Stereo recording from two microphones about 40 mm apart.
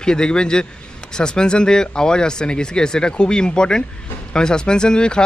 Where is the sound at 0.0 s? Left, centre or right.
Centre.